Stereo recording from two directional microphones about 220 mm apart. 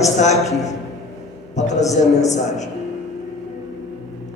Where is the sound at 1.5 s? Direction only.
30° left (ahead or behind).